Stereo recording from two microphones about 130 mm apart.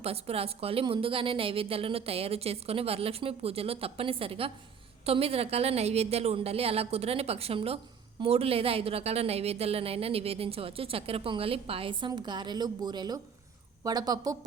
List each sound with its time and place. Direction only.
0.0 s a woman's voice: 50° right (ahead or behind); by 14.3 s 30° right (ahead or behind)